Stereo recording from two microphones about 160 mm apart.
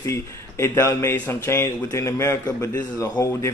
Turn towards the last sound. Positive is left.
turn(degrees=20)  # may be behind; listen again after turning